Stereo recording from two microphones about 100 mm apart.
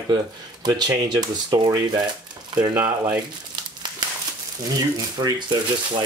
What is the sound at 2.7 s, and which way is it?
Speech, 20° right (ahead or behind).